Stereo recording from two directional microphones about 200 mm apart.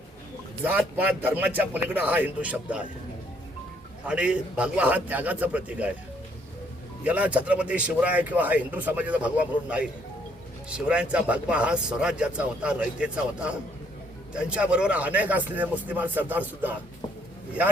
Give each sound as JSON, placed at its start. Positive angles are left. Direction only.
{"t": 0.6, "sound": "speech", "side_deg": -10}
{"t": 4.0, "sound": "speech", "side_deg": -5}
{"t": 7.0, "sound": "speech", "side_deg": -5}